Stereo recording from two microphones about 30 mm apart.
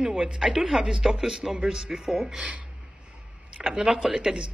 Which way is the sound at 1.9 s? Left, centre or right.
Centre.